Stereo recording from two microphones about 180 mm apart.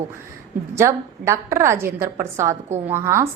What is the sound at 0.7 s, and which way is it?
A woman's voice, 15° right (ahead or behind).